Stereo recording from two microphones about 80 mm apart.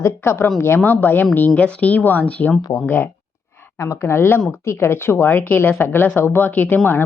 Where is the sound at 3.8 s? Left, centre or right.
Left.